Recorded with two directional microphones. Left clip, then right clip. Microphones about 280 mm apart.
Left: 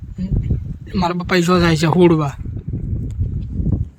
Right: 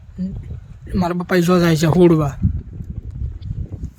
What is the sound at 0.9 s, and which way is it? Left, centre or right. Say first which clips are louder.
Speech: left 1 dB; centre.